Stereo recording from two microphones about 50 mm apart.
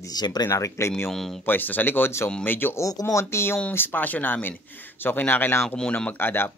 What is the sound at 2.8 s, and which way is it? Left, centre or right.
Speech, left.